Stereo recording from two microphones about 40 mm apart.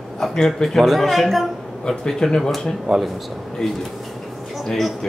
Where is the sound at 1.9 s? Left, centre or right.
Centre.